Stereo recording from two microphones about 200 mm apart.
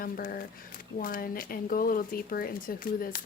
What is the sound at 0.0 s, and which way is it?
Speech, 45° left (ahead or behind).